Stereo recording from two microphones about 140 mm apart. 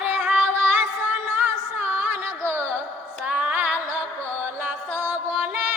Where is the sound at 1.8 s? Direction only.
15° right (ahead or behind).